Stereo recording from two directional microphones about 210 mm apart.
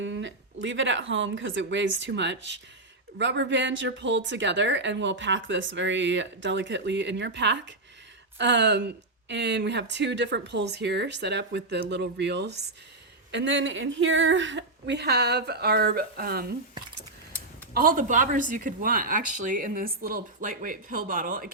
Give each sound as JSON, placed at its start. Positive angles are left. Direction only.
{"t": 0.0, "sound": "a woman's voice", "side_deg": -60}
{"t": 17.7, "sound": "speech", "side_deg": -40}